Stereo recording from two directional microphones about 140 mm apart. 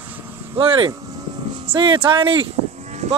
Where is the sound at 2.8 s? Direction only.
55° right (ahead or behind).